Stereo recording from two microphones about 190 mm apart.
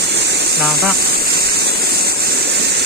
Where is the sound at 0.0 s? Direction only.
65° right (ahead or behind).